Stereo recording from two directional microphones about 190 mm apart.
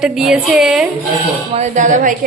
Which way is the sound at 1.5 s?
35° right (ahead or behind).